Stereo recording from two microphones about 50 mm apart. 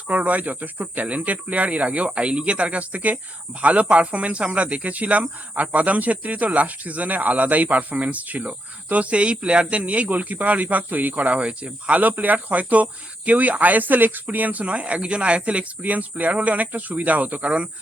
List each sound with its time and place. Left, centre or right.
0.1 s speech: right